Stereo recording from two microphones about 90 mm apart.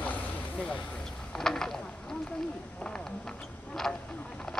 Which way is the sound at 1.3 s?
5° left (ahead or behind).